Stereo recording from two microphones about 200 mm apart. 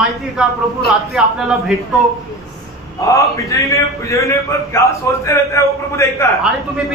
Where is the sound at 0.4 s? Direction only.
Centre (ahead or behind).